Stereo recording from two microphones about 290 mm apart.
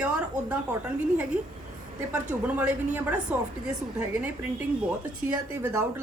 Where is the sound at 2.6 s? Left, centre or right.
Centre.